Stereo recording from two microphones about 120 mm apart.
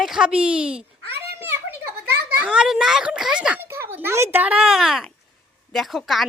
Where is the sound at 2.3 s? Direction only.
5° right (ahead or behind).